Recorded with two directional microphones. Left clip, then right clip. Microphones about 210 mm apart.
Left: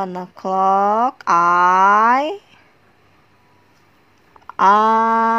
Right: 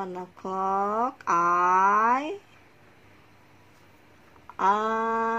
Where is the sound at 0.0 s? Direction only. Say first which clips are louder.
Left 10 dB; 30° left (ahead or behind).